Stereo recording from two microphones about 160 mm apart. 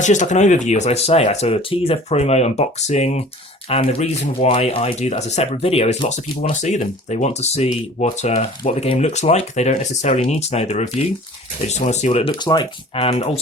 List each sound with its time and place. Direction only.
0.0 s speech: 50° left (ahead or behind)
12.3 s speech: 25° left (ahead or behind)